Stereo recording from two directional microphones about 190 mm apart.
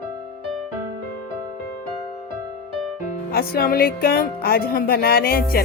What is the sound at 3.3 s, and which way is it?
Speech, 50° left (ahead or behind).